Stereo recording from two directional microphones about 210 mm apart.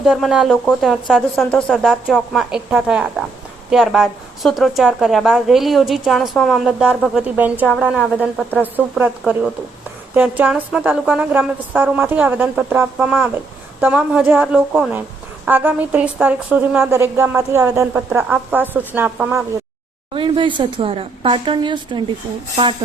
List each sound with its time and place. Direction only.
0.0 s a woman's voice: centre (ahead or behind)
20.1 s speech: 25° right (ahead or behind)